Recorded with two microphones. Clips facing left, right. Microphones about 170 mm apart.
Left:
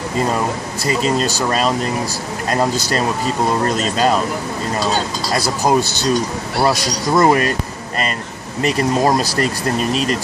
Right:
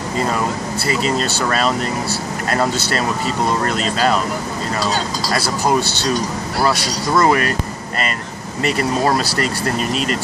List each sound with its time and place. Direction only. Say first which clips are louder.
5.3 s speech: left 2 dB; 20° left (ahead or behind)
7.2 s speech: left 2 dB; 25° left (ahead or behind)